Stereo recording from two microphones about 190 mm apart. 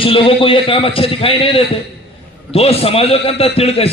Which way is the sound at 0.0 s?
30° left (ahead or behind).